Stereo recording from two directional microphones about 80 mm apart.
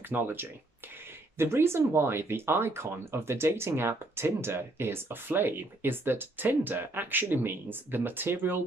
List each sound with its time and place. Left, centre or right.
0.1 s speech: right